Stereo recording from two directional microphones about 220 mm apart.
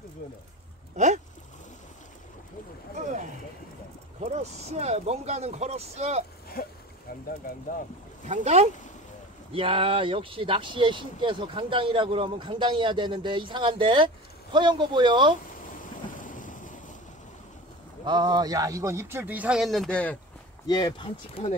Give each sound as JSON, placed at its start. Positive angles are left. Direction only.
{"t": 0.9, "sound": "speech", "side_deg": -30}
{"t": 4.2, "sound": "speech", "side_deg": -30}
{"t": 6.6, "sound": "a sound", "side_deg": 40}
{"t": 8.3, "sound": "speech", "side_deg": -30}
{"t": 16.2, "sound": "thunder", "side_deg": 35}
{"t": 18.0, "sound": "speech", "side_deg": -20}
{"t": 20.6, "sound": "speech", "side_deg": 20}